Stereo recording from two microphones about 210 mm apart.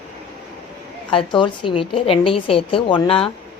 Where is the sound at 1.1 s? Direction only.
25° left (ahead or behind).